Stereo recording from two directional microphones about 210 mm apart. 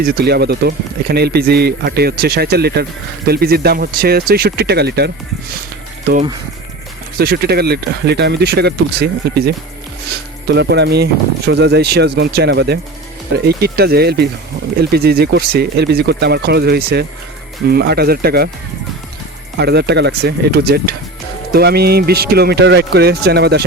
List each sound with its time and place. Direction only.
0.1 s speech: 50° right (ahead or behind)
7.2 s speech: 50° right (ahead or behind)
19.5 s speech: 50° right (ahead or behind)